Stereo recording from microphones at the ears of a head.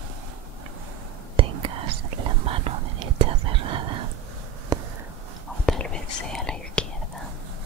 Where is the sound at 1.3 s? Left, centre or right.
Right.